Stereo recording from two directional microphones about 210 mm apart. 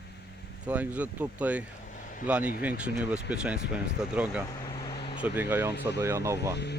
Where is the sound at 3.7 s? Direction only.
5° right (ahead or behind).